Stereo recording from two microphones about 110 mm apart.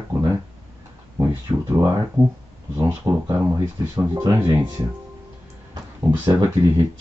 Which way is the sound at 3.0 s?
25° right (ahead or behind).